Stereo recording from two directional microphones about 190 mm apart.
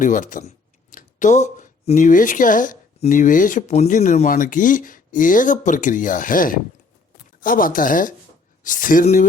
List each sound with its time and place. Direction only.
0.0 s speech: 40° left (ahead or behind)